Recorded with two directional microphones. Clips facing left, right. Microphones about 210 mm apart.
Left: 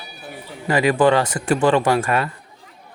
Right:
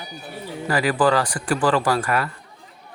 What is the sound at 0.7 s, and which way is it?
Speech, 25° left (ahead or behind).